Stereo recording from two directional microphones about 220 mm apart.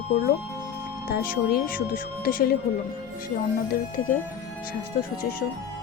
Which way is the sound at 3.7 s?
40° left (ahead or behind).